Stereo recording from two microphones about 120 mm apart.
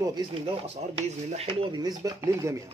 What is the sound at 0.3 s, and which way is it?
Speech, 55° right (ahead or behind).